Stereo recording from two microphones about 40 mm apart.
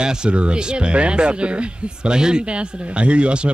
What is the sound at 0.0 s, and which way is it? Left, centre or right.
Speech, right.